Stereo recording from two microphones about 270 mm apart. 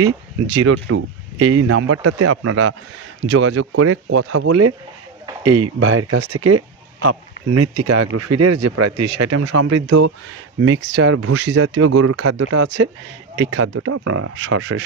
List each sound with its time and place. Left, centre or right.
0.8 s speech: right
10.6 s speech: right
13.4 s speech: right